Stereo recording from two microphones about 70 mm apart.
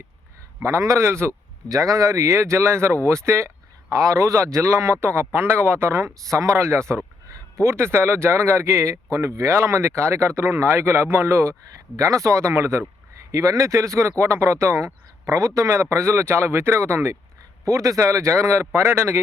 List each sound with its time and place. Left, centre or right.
0.6 s speech: right
1.6 s speech: right
11.9 s speech: right
13.1 s speech: right
17.7 s speech: right